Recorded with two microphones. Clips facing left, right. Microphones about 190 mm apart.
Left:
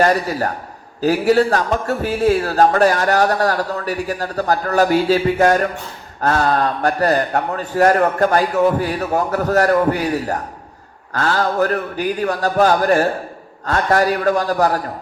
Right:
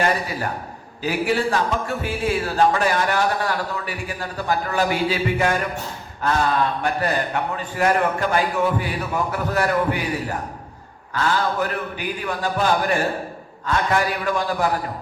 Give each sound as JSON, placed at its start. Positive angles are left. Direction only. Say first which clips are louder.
{"t": 0.0, "sound": "a man's voice", "louder": "left 6 dB", "side_deg": 40}